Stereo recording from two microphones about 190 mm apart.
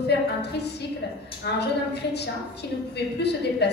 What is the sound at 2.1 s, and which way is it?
A woman's voice, 60° left (ahead or behind).